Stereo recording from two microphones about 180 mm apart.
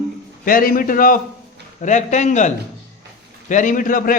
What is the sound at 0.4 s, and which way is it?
A man's voice, 50° left (ahead or behind).